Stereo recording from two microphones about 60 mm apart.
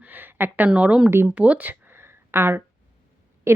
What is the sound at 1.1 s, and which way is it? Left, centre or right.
Speech, right.